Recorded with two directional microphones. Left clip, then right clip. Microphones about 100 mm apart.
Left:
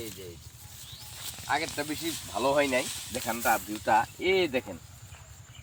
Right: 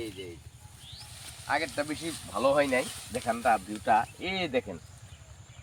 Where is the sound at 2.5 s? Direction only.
50° right (ahead or behind).